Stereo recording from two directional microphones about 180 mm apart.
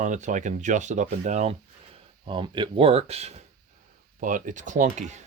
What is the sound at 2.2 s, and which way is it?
Speech, 25° right (ahead or behind).